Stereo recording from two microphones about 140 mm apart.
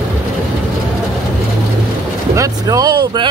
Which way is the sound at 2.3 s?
25° right (ahead or behind).